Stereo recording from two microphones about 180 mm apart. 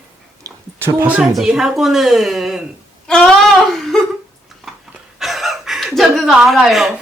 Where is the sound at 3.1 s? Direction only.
5° left (ahead or behind).